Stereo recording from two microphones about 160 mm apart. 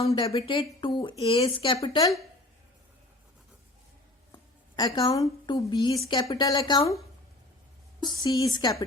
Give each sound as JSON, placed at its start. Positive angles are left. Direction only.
{"t": 0.1, "sound": "speech", "side_deg": 20}
{"t": 0.3, "sound": "speech", "side_deg": 35}
{"t": 4.9, "sound": "speech", "side_deg": 20}
{"t": 8.0, "sound": "speech", "side_deg": 25}